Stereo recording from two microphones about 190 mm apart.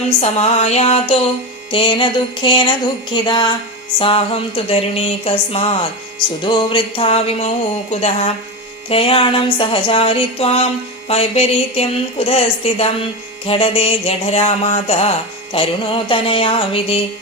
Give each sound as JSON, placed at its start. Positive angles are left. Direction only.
{"t": 0.2, "sound": "a woman's voice", "side_deg": 35}
{"t": 1.7, "sound": "music", "side_deg": 25}
{"t": 11.1, "sound": "a woman's voice", "side_deg": 30}
{"t": 15.5, "sound": "music", "side_deg": 30}